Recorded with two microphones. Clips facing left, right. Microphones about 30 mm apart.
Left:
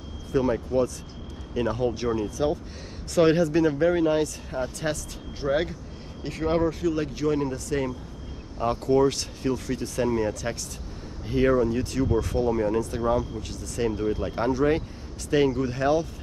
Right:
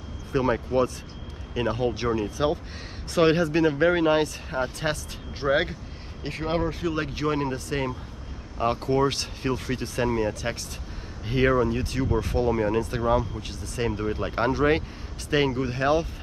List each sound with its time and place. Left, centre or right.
0.3 s speech: right
2.2 s speech: right
3.2 s speech: right